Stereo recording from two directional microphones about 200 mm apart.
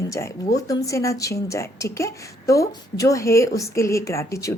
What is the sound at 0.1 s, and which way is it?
Speech, 15° left (ahead or behind).